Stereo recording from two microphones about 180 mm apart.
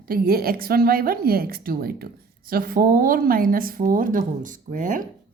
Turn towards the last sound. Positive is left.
turn(degrees=-45)  # may be behind; listen again after turning